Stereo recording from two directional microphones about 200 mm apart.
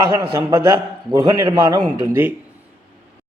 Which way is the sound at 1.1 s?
15° right (ahead or behind).